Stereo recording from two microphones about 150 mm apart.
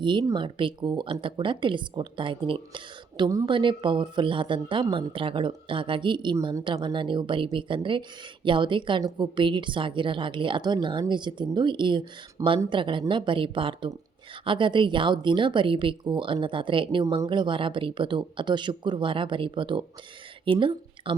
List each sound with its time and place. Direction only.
0.0 s a woman's voice: 30° right (ahead or behind)
3.2 s speech: 20° right (ahead or behind)
3.5 s a woman's voice: 30° right (ahead or behind)